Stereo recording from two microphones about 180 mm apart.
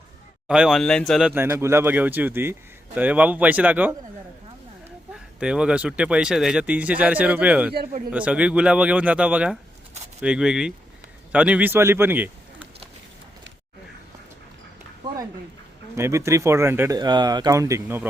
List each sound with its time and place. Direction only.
0.4 s speech: 5° right (ahead or behind)
1.3 s speech: 10° right (ahead or behind)
5.1 s a man's voice: 5° right (ahead or behind)
16.0 s speech: 15° right (ahead or behind)
17.0 s speech: 25° right (ahead or behind)